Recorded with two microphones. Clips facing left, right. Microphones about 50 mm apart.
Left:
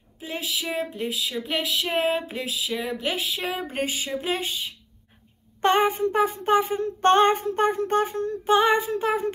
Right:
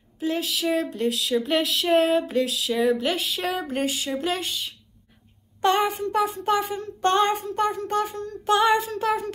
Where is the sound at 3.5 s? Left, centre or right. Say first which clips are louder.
Right 2 dB; left.